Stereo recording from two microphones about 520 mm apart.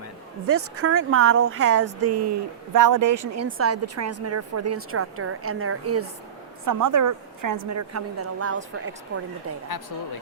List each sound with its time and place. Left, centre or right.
0.4 s a woman's voice: right